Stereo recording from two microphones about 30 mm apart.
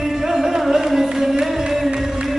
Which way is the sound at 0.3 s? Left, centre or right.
Centre.